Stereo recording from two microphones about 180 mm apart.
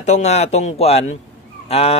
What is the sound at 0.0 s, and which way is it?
Speech, 40° left (ahead or behind).